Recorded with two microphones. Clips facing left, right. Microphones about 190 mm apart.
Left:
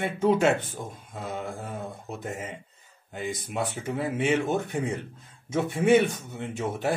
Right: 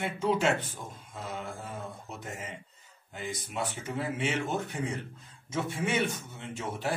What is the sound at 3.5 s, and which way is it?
Speech, 55° left (ahead or behind).